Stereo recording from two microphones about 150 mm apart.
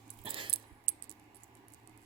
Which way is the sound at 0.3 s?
35° right (ahead or behind).